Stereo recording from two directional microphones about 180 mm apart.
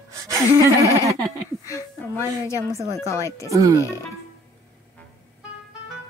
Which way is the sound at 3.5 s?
20° right (ahead or behind).